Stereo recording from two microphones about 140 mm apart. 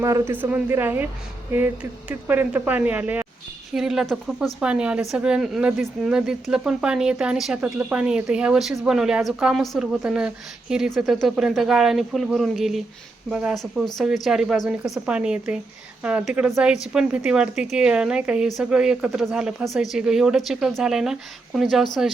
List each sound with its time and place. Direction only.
0.0 s speech: 20° right (ahead or behind); by 21.8 s centre (ahead or behind)